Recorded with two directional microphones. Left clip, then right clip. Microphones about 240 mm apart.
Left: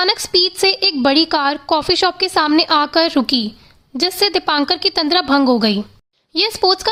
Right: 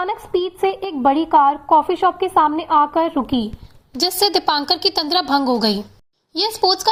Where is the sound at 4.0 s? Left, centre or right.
Centre.